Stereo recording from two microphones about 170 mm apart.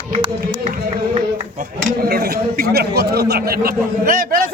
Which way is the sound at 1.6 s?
65° right (ahead or behind).